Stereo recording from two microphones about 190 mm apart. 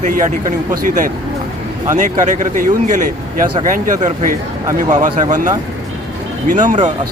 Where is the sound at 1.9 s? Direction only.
40° right (ahead or behind).